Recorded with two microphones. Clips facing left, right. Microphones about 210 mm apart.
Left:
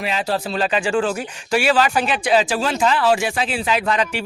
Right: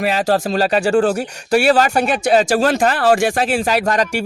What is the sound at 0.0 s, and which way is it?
Speech, 45° right (ahead or behind).